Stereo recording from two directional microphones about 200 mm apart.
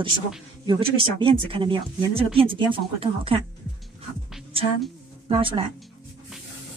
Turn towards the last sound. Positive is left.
turn(degrees=-25)  # may be behind; listen again after turning